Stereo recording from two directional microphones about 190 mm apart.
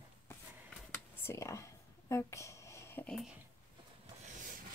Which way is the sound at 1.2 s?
15° left (ahead or behind).